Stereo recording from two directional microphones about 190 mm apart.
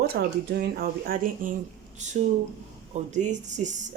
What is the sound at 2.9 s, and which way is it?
Speech, 35° right (ahead or behind).